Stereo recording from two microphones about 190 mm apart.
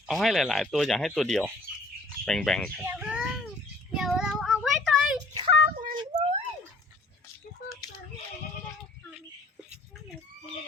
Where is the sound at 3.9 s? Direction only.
5° right (ahead or behind).